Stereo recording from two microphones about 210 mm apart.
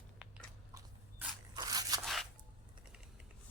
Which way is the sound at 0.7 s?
15° right (ahead or behind).